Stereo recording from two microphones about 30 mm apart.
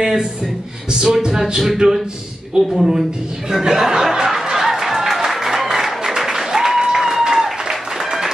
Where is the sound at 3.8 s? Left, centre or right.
Centre.